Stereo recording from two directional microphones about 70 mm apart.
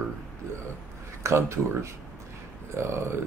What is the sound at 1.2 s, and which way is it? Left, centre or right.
Speech, right.